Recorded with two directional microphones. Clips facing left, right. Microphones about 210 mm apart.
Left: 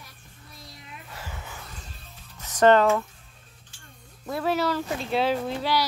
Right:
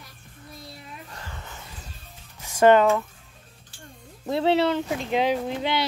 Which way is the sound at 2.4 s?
10° right (ahead or behind).